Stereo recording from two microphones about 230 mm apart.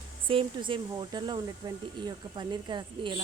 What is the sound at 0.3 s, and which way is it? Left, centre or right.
A woman's voice, right.